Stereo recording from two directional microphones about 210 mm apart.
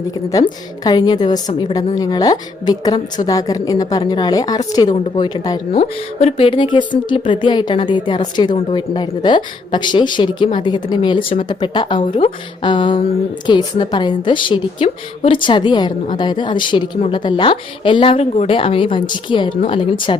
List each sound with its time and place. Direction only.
0.3 s speech: 20° left (ahead or behind)
5.7 s speech: 30° left (ahead or behind)